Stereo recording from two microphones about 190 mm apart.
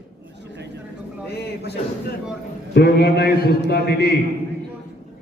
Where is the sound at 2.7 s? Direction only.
60° left (ahead or behind).